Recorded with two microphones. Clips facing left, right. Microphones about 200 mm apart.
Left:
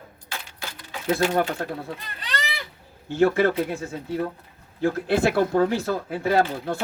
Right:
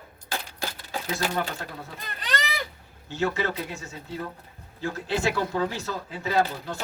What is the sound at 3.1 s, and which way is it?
Speech, 55° left (ahead or behind).